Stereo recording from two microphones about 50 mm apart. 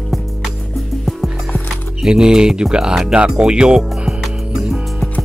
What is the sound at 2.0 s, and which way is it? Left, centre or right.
Speech, centre.